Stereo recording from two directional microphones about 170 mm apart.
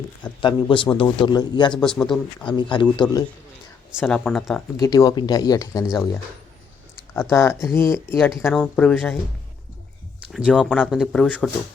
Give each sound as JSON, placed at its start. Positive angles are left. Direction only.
{"t": 0.2, "sound": "speech", "side_deg": 30}
{"t": 1.7, "sound": "speech", "side_deg": 5}
{"t": 2.5, "sound": "speech", "side_deg": 30}
{"t": 4.0, "sound": "speech", "side_deg": 5}
{"t": 4.8, "sound": "speech", "side_deg": 20}
{"t": 7.2, "sound": "speech", "side_deg": 15}
{"t": 8.5, "sound": "speech", "side_deg": 5}
{"t": 10.3, "sound": "speech", "side_deg": 0}